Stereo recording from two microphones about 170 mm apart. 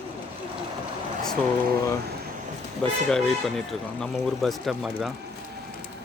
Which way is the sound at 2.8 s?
5° left (ahead or behind).